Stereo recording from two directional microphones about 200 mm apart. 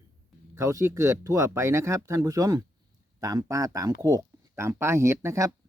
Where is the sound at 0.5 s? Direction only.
15° right (ahead or behind).